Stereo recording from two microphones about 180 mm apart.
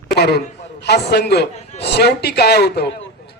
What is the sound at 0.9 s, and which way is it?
A man's voice, 65° left (ahead or behind).